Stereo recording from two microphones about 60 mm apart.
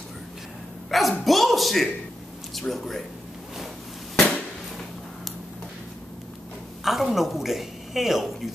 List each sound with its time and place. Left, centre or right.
0.8 s a sound: centre
2.5 s speech: centre
6.8 s a woman's voice: centre